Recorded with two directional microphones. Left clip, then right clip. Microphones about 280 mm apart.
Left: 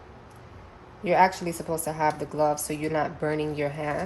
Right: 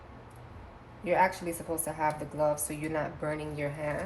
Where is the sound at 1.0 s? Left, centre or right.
Left.